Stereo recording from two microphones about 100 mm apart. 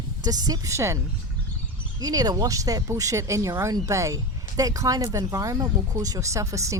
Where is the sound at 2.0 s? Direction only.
40° right (ahead or behind).